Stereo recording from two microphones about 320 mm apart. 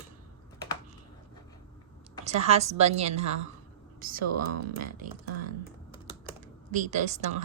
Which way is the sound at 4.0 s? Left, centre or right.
Right.